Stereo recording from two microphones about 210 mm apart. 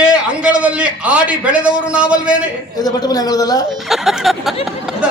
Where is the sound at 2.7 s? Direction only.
20° left (ahead or behind).